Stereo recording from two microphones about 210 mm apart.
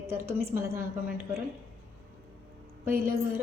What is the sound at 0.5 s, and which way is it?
Speech, 10° right (ahead or behind).